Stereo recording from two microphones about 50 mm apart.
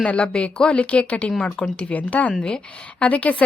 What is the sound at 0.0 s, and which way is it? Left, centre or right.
A woman's voice, left.